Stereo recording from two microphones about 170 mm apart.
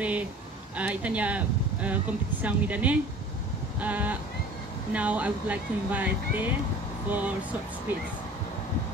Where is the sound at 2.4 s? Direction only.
10° right (ahead or behind).